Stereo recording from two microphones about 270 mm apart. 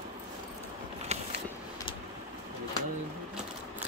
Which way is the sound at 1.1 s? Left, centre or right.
Right.